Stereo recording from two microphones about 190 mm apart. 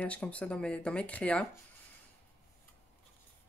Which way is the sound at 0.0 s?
5° left (ahead or behind).